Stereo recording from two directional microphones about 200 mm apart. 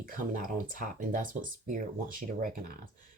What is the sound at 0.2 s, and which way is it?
Speech, 45° right (ahead or behind).